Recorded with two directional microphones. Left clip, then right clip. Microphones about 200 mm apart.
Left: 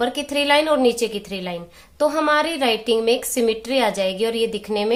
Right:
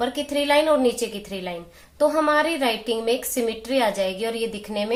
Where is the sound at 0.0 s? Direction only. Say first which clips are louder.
Left 3 dB; 35° left (ahead or behind).